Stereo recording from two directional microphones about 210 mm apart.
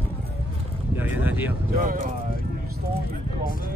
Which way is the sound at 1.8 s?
40° right (ahead or behind).